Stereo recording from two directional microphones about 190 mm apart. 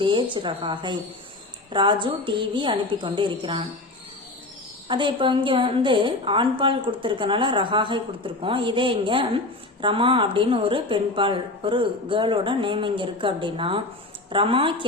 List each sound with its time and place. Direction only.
0.0 s a woman's voice: 25° right (ahead or behind)
4.9 s a woman's voice: 25° right (ahead or behind)